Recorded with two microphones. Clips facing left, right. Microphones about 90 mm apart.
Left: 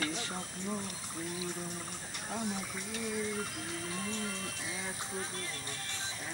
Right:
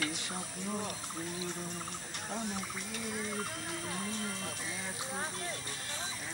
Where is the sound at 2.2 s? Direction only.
Centre (ahead or behind).